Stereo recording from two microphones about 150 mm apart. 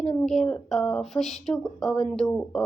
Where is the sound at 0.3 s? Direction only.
5° left (ahead or behind).